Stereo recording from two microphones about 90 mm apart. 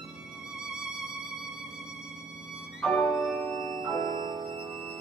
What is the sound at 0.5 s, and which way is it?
Music, 5° right (ahead or behind).